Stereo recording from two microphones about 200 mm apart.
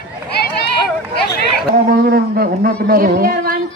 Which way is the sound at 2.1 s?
50° right (ahead or behind).